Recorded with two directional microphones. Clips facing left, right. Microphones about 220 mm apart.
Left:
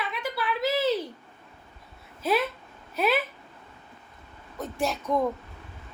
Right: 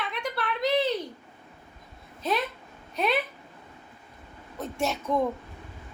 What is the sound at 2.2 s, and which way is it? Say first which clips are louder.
Speech: left 3 dB; 5° left (ahead or behind).